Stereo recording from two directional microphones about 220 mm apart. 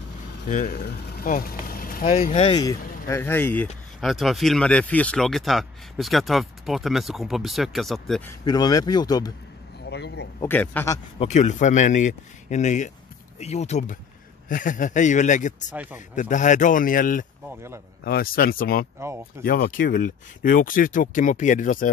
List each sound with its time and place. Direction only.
0.5 s speech: 40° left (ahead or behind)
2.0 s speech: 30° left (ahead or behind); by 8.2 s centre (ahead or behind)
8.3 s speech: 15° left (ahead or behind)
9.8 s a sound: 50° left (ahead or behind)
10.4 s speech: 10° left (ahead or behind)
11.1 s speech: 30° left (ahead or behind)
15.7 s speech: 5° right (ahead or behind)
16.2 s speech: 35° left (ahead or behind)